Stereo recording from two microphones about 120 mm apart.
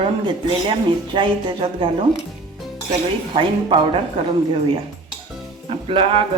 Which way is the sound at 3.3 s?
45° right (ahead or behind).